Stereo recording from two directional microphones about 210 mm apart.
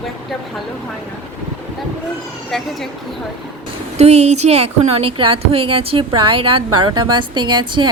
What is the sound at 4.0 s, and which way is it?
Speech, 30° right (ahead or behind).